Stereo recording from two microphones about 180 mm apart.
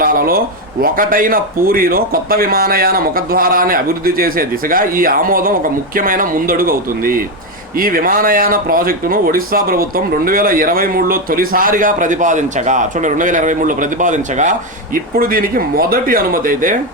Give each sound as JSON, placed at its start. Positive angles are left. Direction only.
{"t": 0.0, "sound": "speech", "side_deg": -50}